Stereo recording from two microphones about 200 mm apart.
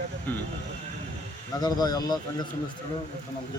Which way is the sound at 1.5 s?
20° left (ahead or behind).